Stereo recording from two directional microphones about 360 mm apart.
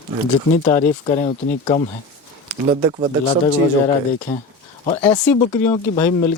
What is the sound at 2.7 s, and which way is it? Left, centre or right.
Speech, centre.